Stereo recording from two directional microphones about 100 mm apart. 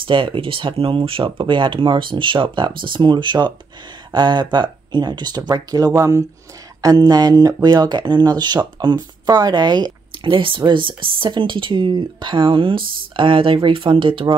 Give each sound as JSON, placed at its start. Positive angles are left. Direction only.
{"t": 0.0, "sound": "speech", "side_deg": -60}
{"t": 6.8, "sound": "speech", "side_deg": -40}